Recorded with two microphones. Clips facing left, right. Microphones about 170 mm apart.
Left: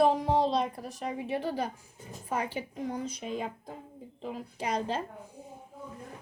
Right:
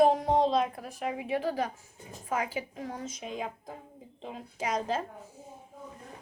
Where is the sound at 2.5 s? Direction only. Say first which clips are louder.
Left 2 dB; centre (ahead or behind).